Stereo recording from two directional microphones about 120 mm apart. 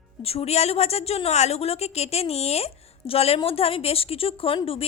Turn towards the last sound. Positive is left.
turn(degrees=50)  # may be behind; listen again after turning